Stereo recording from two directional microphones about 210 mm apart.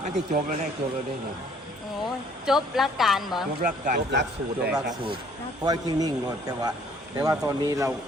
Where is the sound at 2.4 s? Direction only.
Centre (ahead or behind).